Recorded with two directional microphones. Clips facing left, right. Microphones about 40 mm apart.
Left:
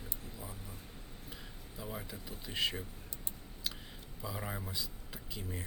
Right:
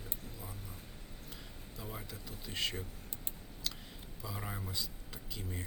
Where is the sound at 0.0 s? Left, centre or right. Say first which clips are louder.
Left 1 dB; centre.